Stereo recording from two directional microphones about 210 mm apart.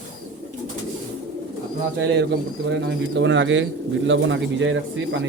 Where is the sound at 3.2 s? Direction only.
60° right (ahead or behind).